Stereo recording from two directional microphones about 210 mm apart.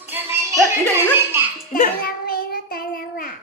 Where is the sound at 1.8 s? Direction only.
45° left (ahead or behind).